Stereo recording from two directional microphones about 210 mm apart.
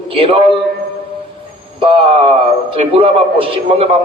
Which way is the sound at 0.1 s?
25° right (ahead or behind).